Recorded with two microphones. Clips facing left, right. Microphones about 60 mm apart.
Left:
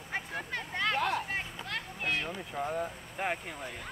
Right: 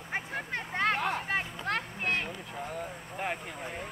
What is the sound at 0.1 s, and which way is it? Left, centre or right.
Vehicle, right.